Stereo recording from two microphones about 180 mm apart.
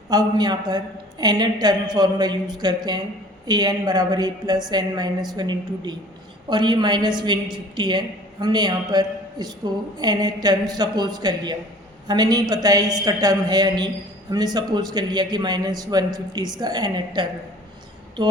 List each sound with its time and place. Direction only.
0.1 s a man's voice: 20° right (ahead or behind)